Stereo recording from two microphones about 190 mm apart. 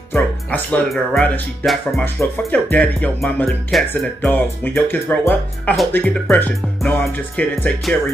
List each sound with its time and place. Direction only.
0.1 s speech: 5° left (ahead or behind)